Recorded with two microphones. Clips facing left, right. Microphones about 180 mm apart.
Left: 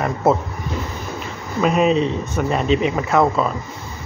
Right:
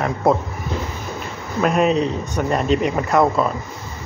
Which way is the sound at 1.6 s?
Centre (ahead or behind).